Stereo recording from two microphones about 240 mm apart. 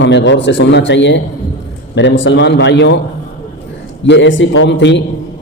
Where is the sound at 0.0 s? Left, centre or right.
Left.